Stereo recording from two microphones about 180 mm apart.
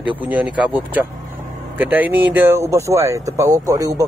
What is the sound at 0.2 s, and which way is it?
Speech, 10° right (ahead or behind).